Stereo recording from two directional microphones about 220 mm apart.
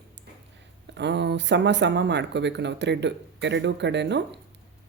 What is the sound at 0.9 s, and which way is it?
Speech, 50° right (ahead or behind).